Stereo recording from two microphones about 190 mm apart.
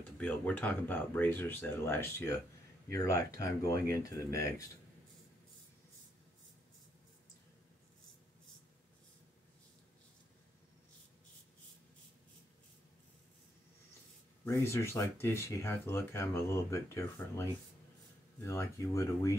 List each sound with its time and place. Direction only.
0.2 s speech: 5° left (ahead or behind)
14.4 s speech: 15° left (ahead or behind)
18.4 s speech: 15° left (ahead or behind)